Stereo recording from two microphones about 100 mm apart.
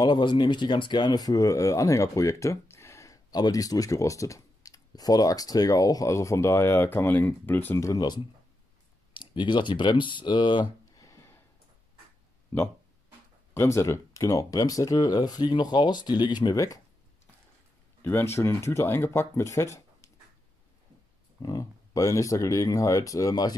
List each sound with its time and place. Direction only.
0.0 s speech: 50° left (ahead or behind); by 8.0 s 25° left (ahead or behind)
9.1 s speech: 55° left (ahead or behind)
11.0 s a sound: 30° left (ahead or behind)
12.5 s speech: 25° left (ahead or behind); by 16.5 s 45° left (ahead or behind)
16.5 s speech: 30° left (ahead or behind)
18.0 s speech: 25° left (ahead or behind)
21.4 s speech: 35° left (ahead or behind)